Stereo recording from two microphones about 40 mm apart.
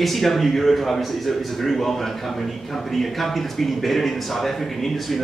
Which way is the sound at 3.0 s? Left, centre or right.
Centre.